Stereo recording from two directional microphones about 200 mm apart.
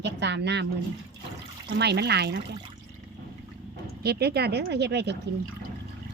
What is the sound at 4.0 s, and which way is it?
Speech, 55° right (ahead or behind).